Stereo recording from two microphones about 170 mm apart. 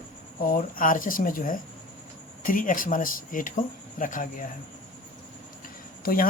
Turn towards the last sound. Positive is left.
turn(degrees=60)  # may be behind; listen again after turning